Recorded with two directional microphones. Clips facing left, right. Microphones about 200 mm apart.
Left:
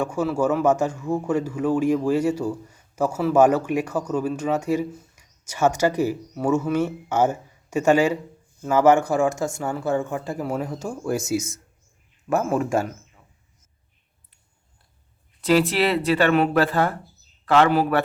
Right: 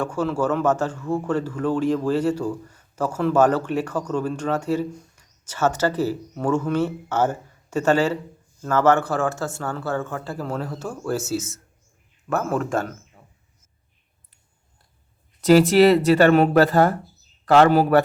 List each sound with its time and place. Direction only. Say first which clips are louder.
0.0 s speech: left 1 dB; 10° left (ahead or behind)
12.4 s speech: left 1 dB; 10° left (ahead or behind)
15.4 s a man's voice: right 6 dB; 40° right (ahead or behind)